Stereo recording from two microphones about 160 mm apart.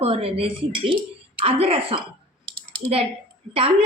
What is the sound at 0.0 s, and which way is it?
Speech, 35° right (ahead or behind).